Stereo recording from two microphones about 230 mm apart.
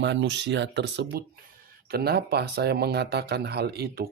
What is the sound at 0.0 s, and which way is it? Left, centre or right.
Speech, right.